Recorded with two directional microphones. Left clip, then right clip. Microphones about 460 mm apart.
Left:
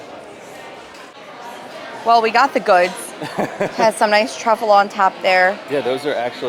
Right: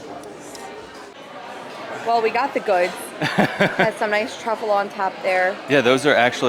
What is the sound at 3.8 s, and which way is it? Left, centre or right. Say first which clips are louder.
A woman's voice: left 5 dB; left.